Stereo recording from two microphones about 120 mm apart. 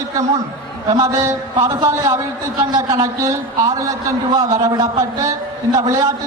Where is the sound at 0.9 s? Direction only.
30° right (ahead or behind).